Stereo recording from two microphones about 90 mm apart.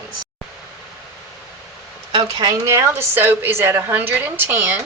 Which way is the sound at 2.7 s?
30° right (ahead or behind).